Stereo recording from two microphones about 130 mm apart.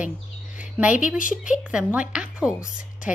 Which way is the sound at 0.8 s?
15° right (ahead or behind).